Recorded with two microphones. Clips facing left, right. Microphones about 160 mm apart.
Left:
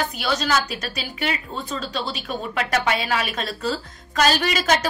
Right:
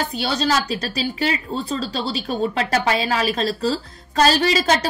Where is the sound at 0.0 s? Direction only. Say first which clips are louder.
Right 2 dB; 30° right (ahead or behind).